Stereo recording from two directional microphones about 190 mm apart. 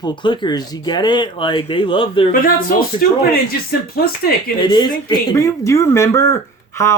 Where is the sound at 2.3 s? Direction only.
50° left (ahead or behind).